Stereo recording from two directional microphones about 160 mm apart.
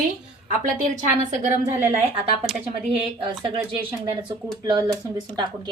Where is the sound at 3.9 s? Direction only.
25° right (ahead or behind).